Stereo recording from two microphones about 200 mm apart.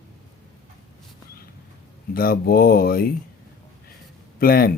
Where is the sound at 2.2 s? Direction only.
50° left (ahead or behind).